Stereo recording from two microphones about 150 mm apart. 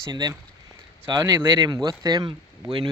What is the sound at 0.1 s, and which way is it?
Speech, 30° right (ahead or behind).